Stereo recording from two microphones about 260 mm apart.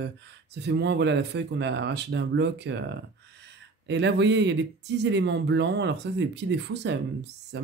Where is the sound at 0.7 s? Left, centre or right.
Right.